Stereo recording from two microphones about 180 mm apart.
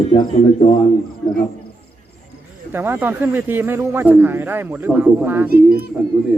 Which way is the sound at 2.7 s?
10° right (ahead or behind).